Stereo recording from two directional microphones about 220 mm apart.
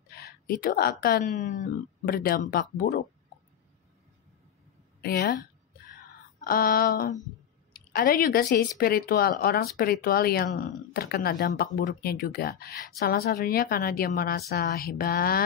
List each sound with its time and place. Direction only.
0.1 s a woman's voice: 45° left (ahead or behind)
5.0 s speech: 45° left (ahead or behind)
6.4 s a woman's voice: 40° left (ahead or behind)